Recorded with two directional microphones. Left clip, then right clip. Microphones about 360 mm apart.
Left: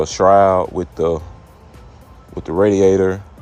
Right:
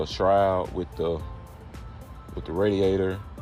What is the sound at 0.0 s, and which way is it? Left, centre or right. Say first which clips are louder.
Speech: left 10 dB; left.